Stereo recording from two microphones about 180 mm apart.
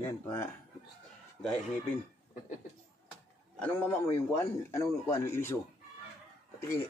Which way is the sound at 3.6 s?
10° left (ahead or behind).